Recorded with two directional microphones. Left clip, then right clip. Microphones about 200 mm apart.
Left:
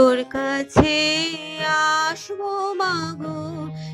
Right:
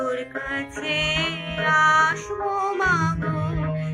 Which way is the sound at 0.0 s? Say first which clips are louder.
Left 10 dB; 50° left (ahead or behind).